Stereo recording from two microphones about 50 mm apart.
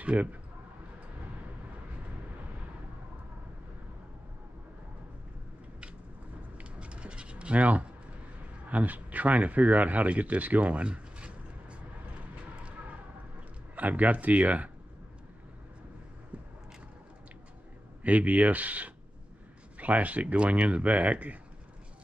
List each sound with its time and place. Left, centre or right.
0.0 s speech: right
6.6 s a sound: right
8.6 s speech: right
13.7 s speech: right
18.0 s speech: right